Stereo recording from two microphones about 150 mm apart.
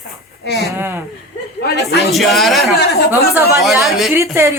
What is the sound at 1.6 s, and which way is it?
Speech, 90° left.